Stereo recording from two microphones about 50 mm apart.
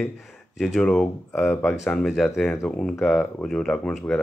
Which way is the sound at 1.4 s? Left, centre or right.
Centre.